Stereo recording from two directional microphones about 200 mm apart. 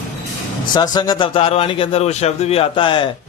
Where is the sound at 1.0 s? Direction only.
20° left (ahead or behind).